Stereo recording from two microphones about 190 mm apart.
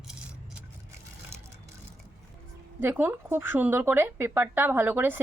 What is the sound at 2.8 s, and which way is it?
Speech, 10° right (ahead or behind).